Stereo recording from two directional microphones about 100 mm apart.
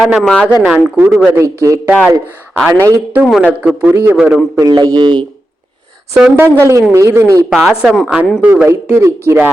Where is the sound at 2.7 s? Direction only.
20° right (ahead or behind).